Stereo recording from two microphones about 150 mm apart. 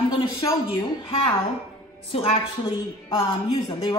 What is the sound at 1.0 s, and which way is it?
A woman's voice, 40° left (ahead or behind).